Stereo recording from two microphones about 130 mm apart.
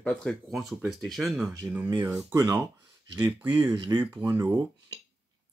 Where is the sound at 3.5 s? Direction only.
30° right (ahead or behind).